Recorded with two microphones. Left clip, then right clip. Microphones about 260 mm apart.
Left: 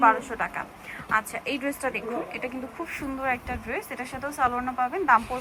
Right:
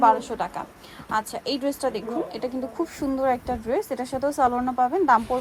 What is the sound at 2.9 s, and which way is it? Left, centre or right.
A woman's voice, centre.